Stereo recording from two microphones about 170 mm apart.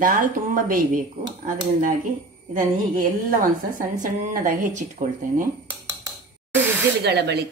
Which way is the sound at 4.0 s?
55° right (ahead or behind).